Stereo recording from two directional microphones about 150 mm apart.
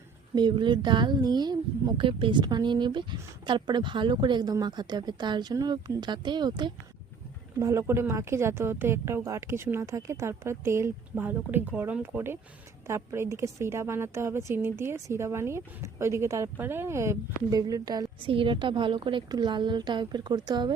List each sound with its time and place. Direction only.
0.3 s a woman's voice: 30° right (ahead or behind)
7.6 s a woman's voice: 20° right (ahead or behind)